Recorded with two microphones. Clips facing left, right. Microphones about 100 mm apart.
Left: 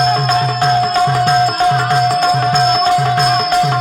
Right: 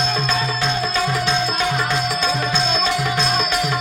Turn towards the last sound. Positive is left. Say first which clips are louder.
# left 8 dB
turn(degrees=40)  # may be behind; listen again after turning